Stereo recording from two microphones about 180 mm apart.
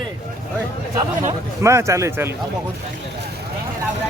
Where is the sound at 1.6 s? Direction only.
15° right (ahead or behind).